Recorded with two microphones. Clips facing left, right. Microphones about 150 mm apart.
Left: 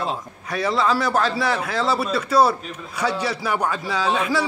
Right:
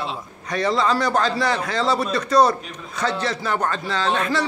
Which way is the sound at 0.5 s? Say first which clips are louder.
Right 1 dB; 5° left (ahead or behind).